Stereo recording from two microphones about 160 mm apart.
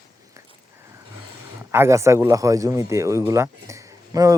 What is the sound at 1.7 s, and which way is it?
Speech, 15° right (ahead or behind).